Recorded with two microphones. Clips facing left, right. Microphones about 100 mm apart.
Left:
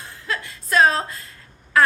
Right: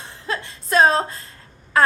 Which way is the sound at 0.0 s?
30° right (ahead or behind).